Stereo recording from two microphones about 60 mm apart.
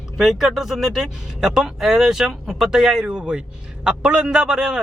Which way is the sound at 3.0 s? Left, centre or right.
Centre.